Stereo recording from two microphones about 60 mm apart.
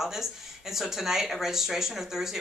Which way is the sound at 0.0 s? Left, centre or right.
Centre.